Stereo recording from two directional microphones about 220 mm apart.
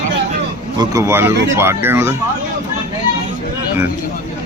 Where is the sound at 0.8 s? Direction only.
15° right (ahead or behind).